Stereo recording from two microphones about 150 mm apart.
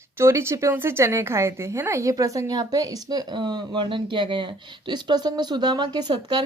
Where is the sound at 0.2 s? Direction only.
20° right (ahead or behind).